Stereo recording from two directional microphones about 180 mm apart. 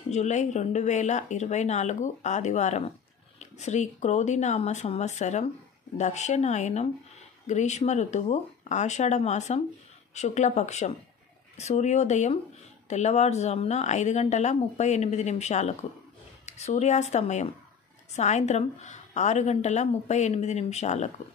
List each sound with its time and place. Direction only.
0.1 s a woman's voice: 40° left (ahead or behind)